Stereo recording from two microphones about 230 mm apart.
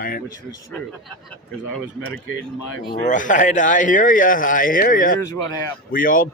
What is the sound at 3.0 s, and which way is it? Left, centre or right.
Speech, left.